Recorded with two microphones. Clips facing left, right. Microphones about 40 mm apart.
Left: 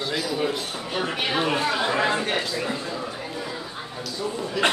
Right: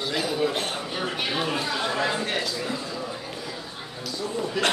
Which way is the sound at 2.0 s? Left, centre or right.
Left.